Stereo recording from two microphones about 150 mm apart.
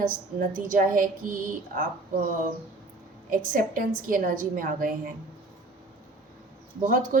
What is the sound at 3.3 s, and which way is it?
A woman's voice, 65° right (ahead or behind).